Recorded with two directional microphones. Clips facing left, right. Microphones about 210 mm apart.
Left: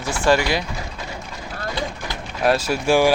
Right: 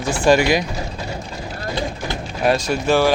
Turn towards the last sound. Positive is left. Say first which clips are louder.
# even
turn(degrees=10)  # may be behind; listen again after turning